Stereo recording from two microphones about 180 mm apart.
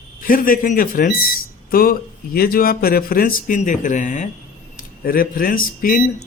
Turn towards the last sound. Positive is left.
turn(degrees=50)  # may be behind; listen again after turning